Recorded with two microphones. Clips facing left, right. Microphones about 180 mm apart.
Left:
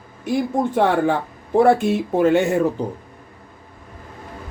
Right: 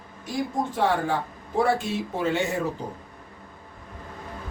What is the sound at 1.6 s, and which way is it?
Speech, 55° left (ahead or behind).